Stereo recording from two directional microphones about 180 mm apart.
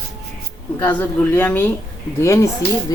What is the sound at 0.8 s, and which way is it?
Speech, 10° left (ahead or behind).